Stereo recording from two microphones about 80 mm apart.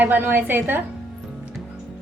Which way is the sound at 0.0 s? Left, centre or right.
Right.